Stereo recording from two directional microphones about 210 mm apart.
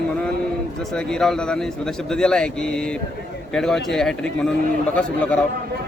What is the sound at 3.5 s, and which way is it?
Speech, 5° left (ahead or behind).